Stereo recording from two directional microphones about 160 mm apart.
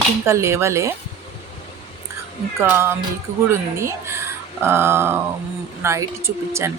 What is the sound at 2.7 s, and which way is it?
A woman's voice, 15° right (ahead or behind).